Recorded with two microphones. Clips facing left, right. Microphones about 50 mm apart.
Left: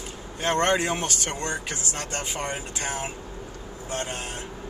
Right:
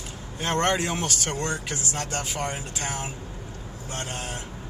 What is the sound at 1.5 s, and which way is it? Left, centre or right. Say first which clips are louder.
Speech: right 1 dB; left.